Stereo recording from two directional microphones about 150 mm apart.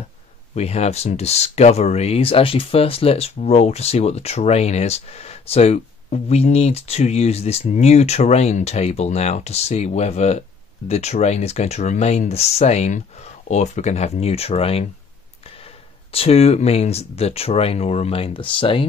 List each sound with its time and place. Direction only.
0.6 s speech: 45° left (ahead or behind)
16.1 s speech: 40° left (ahead or behind)